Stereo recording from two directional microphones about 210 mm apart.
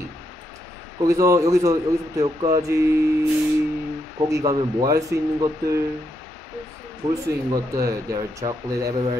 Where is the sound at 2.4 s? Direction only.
20° right (ahead or behind).